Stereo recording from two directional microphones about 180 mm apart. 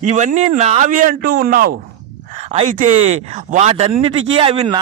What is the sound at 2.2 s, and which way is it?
Speech, 40° right (ahead or behind).